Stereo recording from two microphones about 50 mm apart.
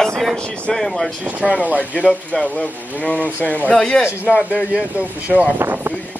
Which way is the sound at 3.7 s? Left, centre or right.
Centre.